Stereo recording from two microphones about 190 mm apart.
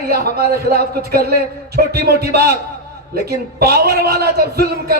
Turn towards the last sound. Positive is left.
turn(degrees=-55)  # may be behind; listen again after turning